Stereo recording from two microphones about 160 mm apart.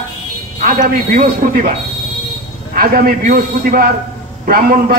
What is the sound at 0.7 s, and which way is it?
Speech, 65° right (ahead or behind).